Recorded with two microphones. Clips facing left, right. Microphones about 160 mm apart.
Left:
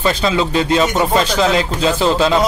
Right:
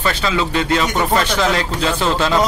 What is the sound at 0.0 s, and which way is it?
Speech, 25° left (ahead or behind).